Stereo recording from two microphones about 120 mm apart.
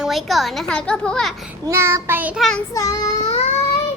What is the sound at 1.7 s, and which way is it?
Child singing, 25° right (ahead or behind).